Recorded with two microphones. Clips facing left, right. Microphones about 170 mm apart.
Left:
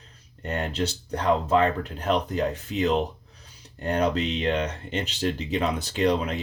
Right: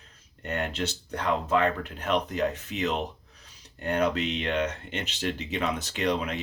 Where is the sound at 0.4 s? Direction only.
30° left (ahead or behind).